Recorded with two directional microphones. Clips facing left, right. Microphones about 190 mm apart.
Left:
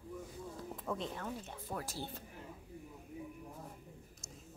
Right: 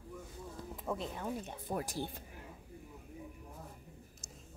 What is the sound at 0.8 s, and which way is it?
Speech, 10° right (ahead or behind).